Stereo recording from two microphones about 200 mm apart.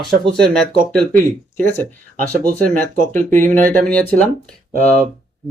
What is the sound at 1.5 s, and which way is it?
Speech, 10° left (ahead or behind).